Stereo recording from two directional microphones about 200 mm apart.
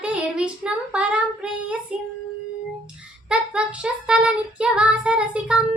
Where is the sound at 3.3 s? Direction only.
5° right (ahead or behind).